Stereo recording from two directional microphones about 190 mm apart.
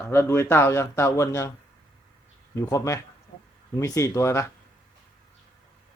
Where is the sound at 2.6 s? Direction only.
15° left (ahead or behind).